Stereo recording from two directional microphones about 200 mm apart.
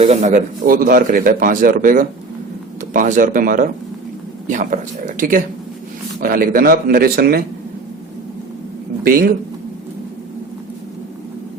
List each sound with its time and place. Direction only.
0.0 s speech: 35° right (ahead or behind); by 7.4 s 50° right (ahead or behind)
9.0 s speech: 50° right (ahead or behind)